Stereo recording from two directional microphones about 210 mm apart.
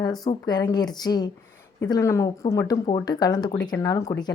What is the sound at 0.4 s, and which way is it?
A woman's voice, 20° left (ahead or behind).